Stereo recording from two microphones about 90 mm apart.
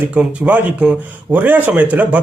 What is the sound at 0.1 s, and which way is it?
A man's voice, 15° right (ahead or behind).